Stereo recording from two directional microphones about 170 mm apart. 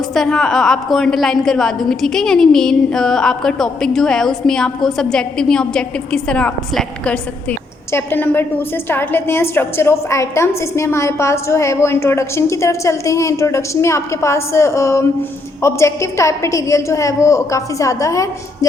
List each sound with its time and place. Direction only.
0.1 s a woman's voice: 5° left (ahead or behind); by 18.7 s 20° left (ahead or behind)